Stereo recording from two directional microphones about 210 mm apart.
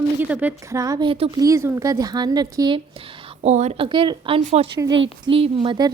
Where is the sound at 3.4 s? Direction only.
30° right (ahead or behind).